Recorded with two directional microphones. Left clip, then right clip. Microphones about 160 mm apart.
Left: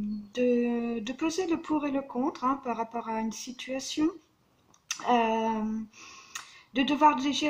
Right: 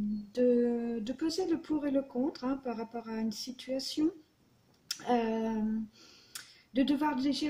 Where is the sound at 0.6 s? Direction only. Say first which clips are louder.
Left 1 dB; 5° right (ahead or behind).